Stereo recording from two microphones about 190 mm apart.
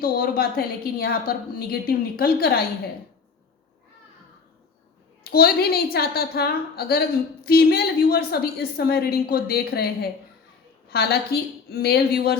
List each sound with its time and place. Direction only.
0.0 s a woman's voice: 50° left (ahead or behind)
5.2 s a woman's voice: 55° left (ahead or behind)